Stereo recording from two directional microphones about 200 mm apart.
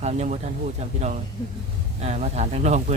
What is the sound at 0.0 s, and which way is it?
Speech, 35° right (ahead or behind).